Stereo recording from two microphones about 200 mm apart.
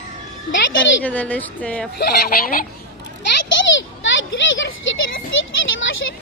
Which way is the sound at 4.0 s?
70° left (ahead or behind).